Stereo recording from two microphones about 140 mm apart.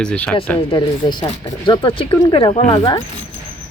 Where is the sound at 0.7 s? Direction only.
35° left (ahead or behind).